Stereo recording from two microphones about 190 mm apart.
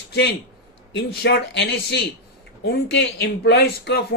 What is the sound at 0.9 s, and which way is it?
Speech, 60° left (ahead or behind).